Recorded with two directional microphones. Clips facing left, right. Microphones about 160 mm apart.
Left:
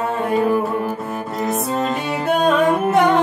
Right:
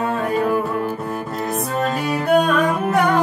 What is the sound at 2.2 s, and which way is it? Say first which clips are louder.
Music: left 1 dB; 20° left (ahead or behind).